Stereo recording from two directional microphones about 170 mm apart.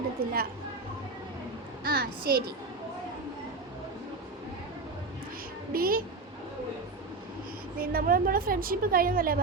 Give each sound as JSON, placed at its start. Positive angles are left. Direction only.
{"t": 0.2, "sound": "a sound", "side_deg": -60}
{"t": 1.8, "sound": "a woman's voice", "side_deg": -65}
{"t": 5.7, "sound": "a woman's voice", "side_deg": -60}
{"t": 7.8, "sound": "a woman's voice", "side_deg": -60}